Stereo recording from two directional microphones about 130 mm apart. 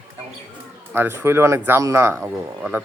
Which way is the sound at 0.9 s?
20° right (ahead or behind).